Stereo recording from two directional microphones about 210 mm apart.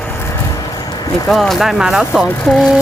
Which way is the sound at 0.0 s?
10° left (ahead or behind).